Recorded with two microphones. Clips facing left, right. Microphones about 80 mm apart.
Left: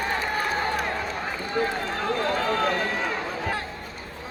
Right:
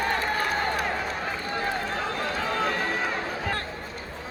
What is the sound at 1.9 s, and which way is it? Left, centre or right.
Run, centre.